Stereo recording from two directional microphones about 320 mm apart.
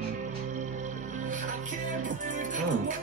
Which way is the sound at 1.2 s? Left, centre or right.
Right.